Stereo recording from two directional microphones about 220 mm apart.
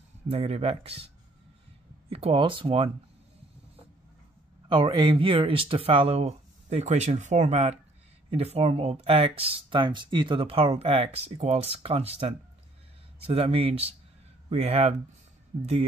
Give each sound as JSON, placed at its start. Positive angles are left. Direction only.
{"t": 0.3, "sound": "speech", "side_deg": -25}
{"t": 4.6, "sound": "speech", "side_deg": -20}